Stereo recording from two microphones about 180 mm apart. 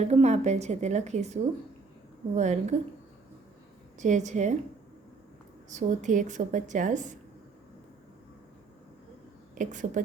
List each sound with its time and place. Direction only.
0.0 s a woman's voice: 35° right (ahead or behind)
4.0 s a woman's voice: 40° right (ahead or behind)
5.7 s a woman's voice: 45° right (ahead or behind)
9.6 s a woman's voice: 45° right (ahead or behind)